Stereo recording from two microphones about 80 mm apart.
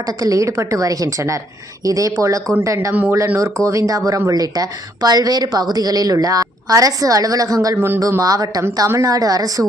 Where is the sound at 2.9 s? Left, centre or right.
Right.